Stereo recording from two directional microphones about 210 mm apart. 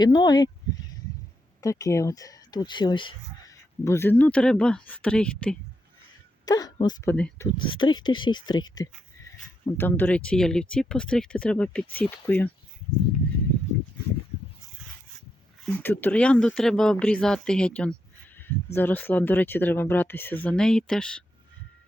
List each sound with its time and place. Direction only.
0.0 s speech: 20° left (ahead or behind)
1.6 s speech: 15° left (ahead or behind)
6.4 s speech: 15° left (ahead or behind)
7.6 s speech: 25° left (ahead or behind)
15.6 s speech: 10° left (ahead or behind)